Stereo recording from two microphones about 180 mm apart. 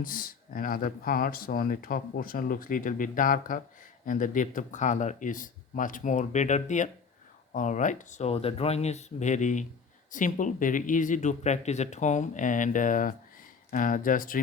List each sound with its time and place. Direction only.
0.0 s speech: 50° left (ahead or behind)